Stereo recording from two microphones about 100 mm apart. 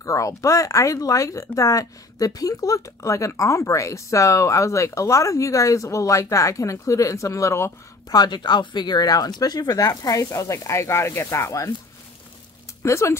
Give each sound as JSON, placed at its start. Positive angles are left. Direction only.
{"t": 0.0, "sound": "speech", "side_deg": 35}
{"t": 8.1, "sound": "speech", "side_deg": 45}
{"t": 12.8, "sound": "speech", "side_deg": 30}